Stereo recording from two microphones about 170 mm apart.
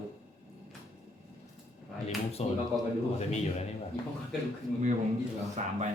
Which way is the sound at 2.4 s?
40° left (ahead or behind).